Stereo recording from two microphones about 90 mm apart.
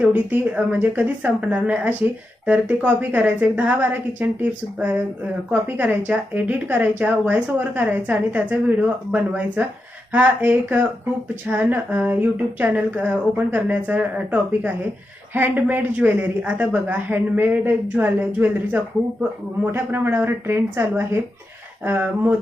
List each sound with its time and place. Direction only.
0.0 s a woman's voice: 15° right (ahead or behind)